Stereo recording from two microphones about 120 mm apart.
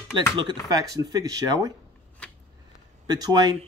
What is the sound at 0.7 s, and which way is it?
Speech, 30° right (ahead or behind).